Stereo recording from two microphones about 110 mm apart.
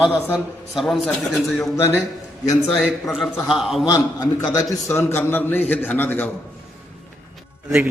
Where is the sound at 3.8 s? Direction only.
35° left (ahead or behind); by 6.3 s 15° left (ahead or behind).